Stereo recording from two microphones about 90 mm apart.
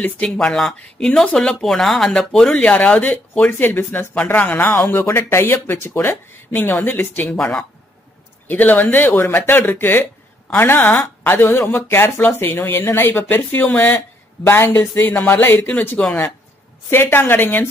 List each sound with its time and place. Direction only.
0.0 s speech: 10° left (ahead or behind)
7.3 s speech: 5° left (ahead or behind)
8.5 s speech: 20° left (ahead or behind)